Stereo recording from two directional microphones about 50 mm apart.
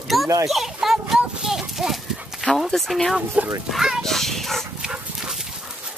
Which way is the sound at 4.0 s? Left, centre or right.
Centre.